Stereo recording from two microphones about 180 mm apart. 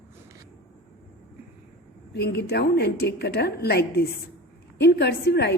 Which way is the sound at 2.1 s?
65° left (ahead or behind).